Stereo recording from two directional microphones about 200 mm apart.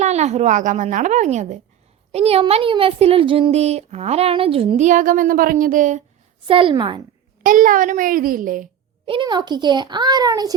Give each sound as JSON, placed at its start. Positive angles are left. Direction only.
{"t": 0.0, "sound": "a woman's voice", "side_deg": -35}
{"t": 6.5, "sound": "a child's voice", "side_deg": -25}
{"t": 7.4, "sound": "a child's voice", "side_deg": -40}
{"t": 9.0, "sound": "a child's voice", "side_deg": -25}